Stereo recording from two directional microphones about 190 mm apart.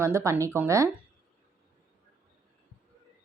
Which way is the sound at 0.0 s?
15° right (ahead or behind).